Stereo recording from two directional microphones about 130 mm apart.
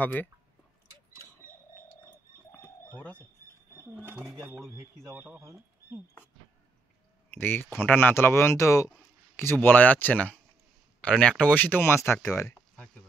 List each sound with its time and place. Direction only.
0.0 s speech: 15° left (ahead or behind)
2.0 s bird: 15° left (ahead or behind)
3.9 s speech: 10° right (ahead or behind)
7.3 s speech: 15° left (ahead or behind)